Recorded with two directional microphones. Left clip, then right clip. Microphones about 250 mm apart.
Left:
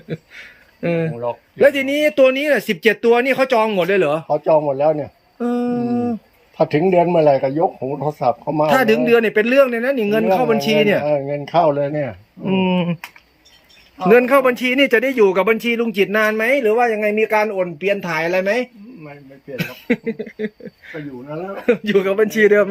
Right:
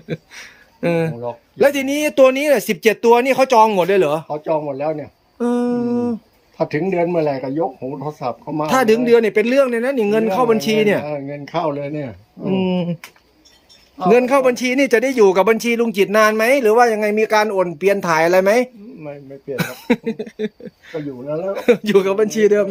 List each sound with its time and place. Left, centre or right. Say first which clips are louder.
0.1 s speech: right 2 dB; centre
4.3 s speech: left 5 dB; left
5.4 s humming: right 2 dB; centre
6.6 s speech: left 4 dB; left
8.7 s speech: right 2 dB; centre
11.0 s speech: left 7 dB; left
12.5 s speech: left 1 dB; centre
14.1 s speech: left 1 dB; centre
19.9 s speech: right 1 dB; centre
21.2 s a man's voice: right 6 dB; right
21.7 s speech: right 2 dB; centre